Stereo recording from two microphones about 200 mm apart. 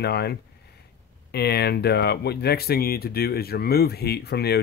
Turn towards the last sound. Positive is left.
turn(degrees=55)  # may be behind; listen again after turning